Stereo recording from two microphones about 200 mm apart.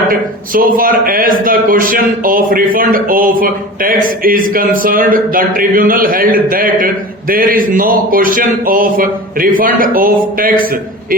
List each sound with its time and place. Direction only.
0.1 s a man's voice: 45° right (ahead or behind)